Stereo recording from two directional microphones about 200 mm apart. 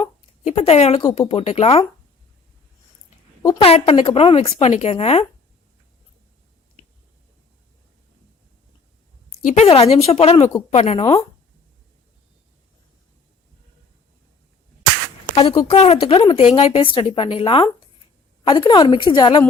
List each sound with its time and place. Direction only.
0.0 s speech: 30° left (ahead or behind)
3.4 s a woman's voice: 20° left (ahead or behind)
3.7 s speech: 30° left (ahead or behind)
9.4 s speech: 35° left (ahead or behind)
11.0 s speech: 20° left (ahead or behind)
15.4 s speech: 30° left (ahead or behind)